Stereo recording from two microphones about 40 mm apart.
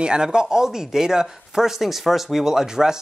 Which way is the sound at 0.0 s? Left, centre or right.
Right.